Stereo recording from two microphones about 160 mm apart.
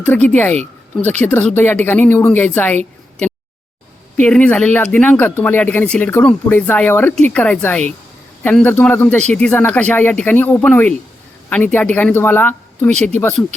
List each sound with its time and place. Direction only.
0.0 s speech: 10° left (ahead or behind)
4.2 s speech: 5° left (ahead or behind)
12.9 s speech: 45° right (ahead or behind)